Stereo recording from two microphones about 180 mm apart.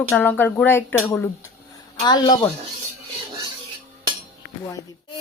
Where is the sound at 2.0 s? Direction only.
25° left (ahead or behind).